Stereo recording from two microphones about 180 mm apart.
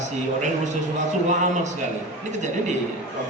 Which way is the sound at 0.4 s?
40° right (ahead or behind).